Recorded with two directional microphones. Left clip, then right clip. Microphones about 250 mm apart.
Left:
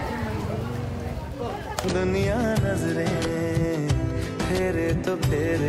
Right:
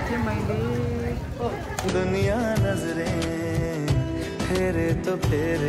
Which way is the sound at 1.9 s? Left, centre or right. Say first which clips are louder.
Right 1 dB; centre.